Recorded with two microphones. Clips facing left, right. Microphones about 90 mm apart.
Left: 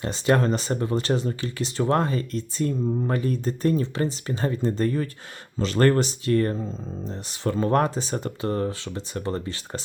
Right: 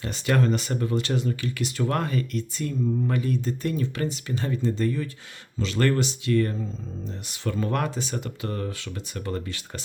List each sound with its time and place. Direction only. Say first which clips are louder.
0.0 s speech: left 3 dB; 35° left (ahead or behind)